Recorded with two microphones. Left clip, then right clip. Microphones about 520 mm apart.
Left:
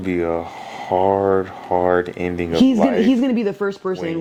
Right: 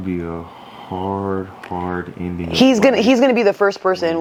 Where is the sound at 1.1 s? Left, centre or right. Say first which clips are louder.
Left 6 dB; left.